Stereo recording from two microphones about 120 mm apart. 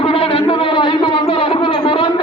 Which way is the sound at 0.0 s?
50° left (ahead or behind).